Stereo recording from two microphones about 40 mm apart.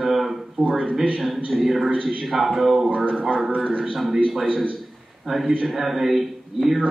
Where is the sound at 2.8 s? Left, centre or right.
Right.